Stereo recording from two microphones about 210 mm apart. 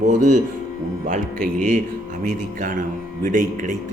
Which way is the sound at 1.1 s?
35° right (ahead or behind).